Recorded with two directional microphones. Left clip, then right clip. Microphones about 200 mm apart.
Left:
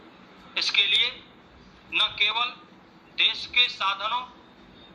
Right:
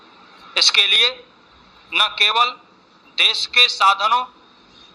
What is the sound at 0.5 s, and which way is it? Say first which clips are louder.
A man's voice: right 8 dB; 55° right (ahead or behind).